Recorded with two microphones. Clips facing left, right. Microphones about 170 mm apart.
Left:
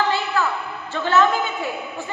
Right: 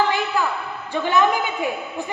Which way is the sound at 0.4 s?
15° right (ahead or behind).